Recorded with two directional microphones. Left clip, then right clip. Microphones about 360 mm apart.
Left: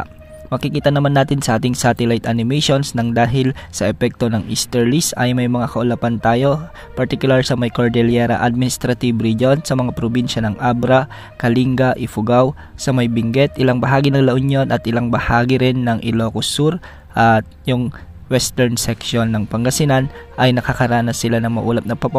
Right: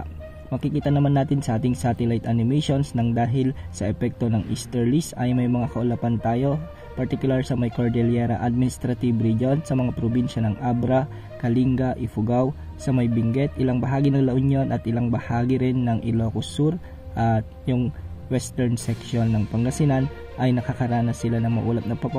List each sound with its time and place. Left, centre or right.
0.6 s speech: left
12.2 s speech: left